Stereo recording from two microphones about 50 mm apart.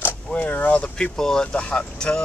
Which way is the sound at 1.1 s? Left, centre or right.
Centre.